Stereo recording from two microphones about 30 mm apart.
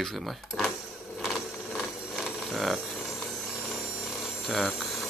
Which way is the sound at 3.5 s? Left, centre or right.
Centre.